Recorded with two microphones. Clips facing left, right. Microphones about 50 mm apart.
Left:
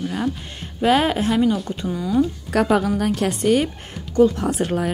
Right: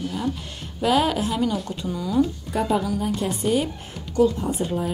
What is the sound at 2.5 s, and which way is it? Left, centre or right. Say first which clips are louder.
A woman's voice: left 6 dB; left.